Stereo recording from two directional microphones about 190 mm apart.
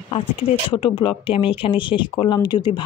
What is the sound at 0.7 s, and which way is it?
Speech, 25° left (ahead or behind).